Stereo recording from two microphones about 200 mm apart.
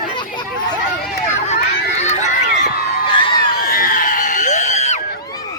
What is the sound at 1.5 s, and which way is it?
Run, 35° left (ahead or behind).